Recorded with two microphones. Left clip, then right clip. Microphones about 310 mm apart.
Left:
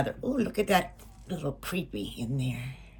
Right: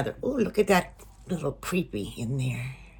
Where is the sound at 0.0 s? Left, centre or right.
Centre.